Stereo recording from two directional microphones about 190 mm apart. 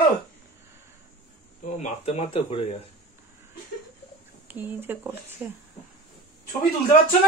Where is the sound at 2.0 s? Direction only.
30° left (ahead or behind).